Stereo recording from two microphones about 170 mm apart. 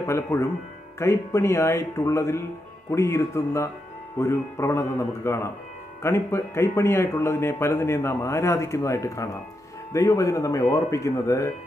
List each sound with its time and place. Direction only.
0.0 s a man's voice: 15° left (ahead or behind)